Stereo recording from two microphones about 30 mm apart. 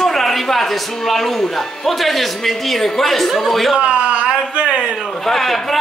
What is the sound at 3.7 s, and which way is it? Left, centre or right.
Speech, right.